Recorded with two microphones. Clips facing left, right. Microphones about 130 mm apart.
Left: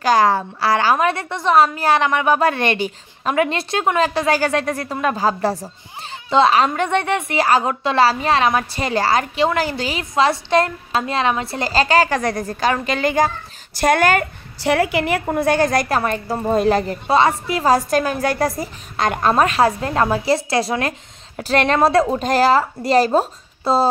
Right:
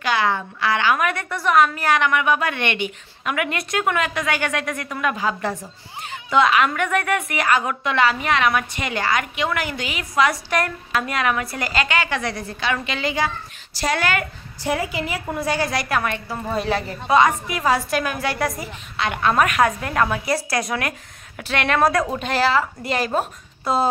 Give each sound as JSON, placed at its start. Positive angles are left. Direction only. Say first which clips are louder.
{"t": 0.0, "sound": "a woman's voice", "louder": "left 6 dB", "side_deg": 40}
{"t": 14.6, "sound": "a woman's voice", "louder": "left 6 dB", "side_deg": 70}
{"t": 17.1, "sound": "a woman's voice", "louder": "left 1 dB", "side_deg": 30}
{"t": 22.3, "sound": "a woman's voice", "louder": "left 4 dB", "side_deg": 40}